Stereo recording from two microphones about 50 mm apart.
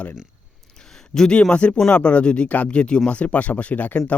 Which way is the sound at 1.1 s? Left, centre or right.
Centre.